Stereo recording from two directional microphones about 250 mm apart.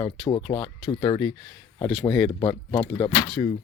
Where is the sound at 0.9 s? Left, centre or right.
Centre.